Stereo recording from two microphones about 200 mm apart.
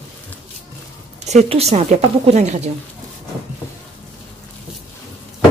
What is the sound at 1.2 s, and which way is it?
A woman's voice, 35° right (ahead or behind).